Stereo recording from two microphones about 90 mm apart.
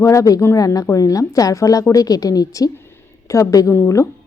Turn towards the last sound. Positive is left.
turn(degrees=35)  # may be behind; listen again after turning